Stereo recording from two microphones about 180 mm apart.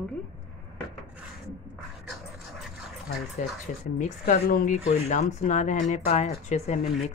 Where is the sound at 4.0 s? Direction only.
45° left (ahead or behind).